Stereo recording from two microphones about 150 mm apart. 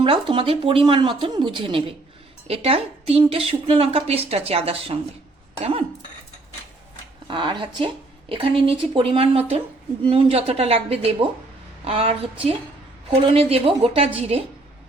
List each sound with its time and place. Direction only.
0.0 s speech: 35° right (ahead or behind)
7.3 s speech: 35° right (ahead or behind)